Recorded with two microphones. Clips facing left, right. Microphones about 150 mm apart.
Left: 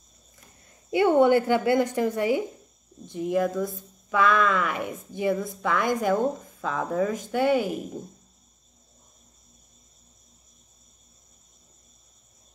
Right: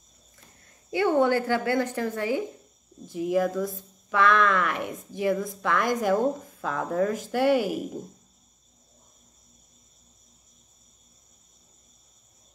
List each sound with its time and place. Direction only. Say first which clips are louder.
0.9 s a woman's voice: left 3 dB; 15° left (ahead or behind)
3.1 s speech: even; 5° right (ahead or behind)